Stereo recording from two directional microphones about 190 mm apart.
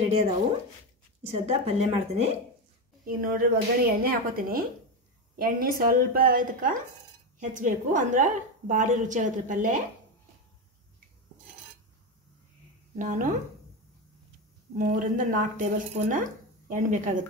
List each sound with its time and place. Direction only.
0.0 s speech: 35° right (ahead or behind)
1.3 s a woman's voice: 35° right (ahead or behind)
3.1 s a woman's voice: 50° right (ahead or behind)
12.9 s a woman's voice: 40° right (ahead or behind)
14.8 s speech: 45° right (ahead or behind)